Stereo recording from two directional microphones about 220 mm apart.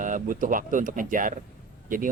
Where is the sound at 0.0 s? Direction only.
35° right (ahead or behind).